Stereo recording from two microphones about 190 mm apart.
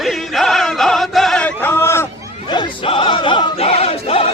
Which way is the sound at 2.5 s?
25° left (ahead or behind).